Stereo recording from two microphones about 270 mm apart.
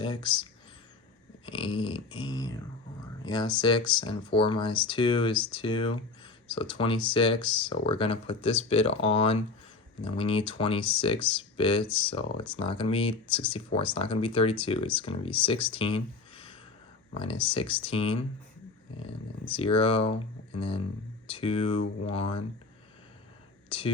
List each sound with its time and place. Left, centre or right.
0.0 s speech: centre
1.5 s speech: centre
23.6 s speech: centre